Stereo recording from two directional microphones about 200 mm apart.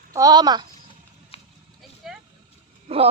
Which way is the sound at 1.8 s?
Centre (ahead or behind).